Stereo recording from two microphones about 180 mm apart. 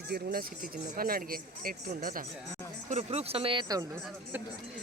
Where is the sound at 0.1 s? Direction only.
60° right (ahead or behind).